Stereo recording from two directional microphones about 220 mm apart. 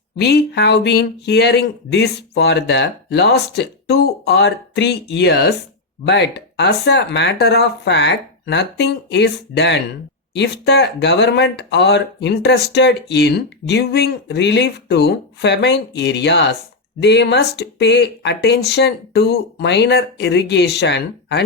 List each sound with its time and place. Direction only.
0.2 s speech: 50° left (ahead or behind)